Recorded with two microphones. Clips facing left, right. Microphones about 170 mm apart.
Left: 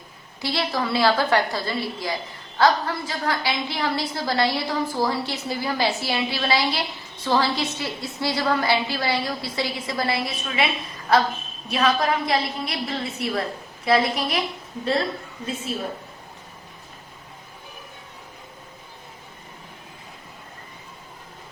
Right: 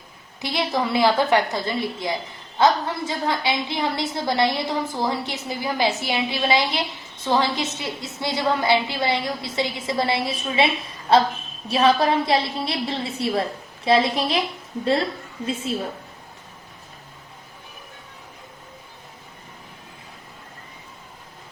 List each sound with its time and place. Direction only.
0.4 s a woman's voice: 20° right (ahead or behind)